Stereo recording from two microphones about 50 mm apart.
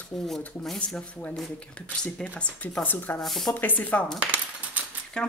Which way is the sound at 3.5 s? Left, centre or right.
Left.